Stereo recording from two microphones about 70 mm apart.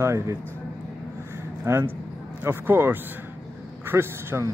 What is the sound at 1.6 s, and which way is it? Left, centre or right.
A man's voice, right.